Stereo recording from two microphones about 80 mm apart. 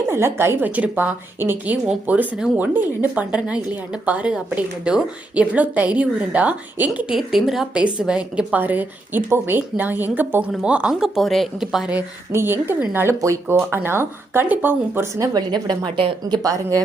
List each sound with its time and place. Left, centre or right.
0.1 s a woman's voice: right
7.2 s a woman's voice: centre
8.6 s a woman's voice: right; by 11.9 s centre
12.3 s speech: right
13.2 s a woman's voice: right
15.3 s a woman's voice: right
16.3 s speech: right